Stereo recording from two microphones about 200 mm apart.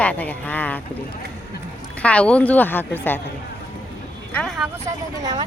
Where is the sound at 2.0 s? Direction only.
5° left (ahead or behind).